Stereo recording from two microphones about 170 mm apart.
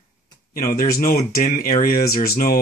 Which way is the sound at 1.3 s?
60° left (ahead or behind).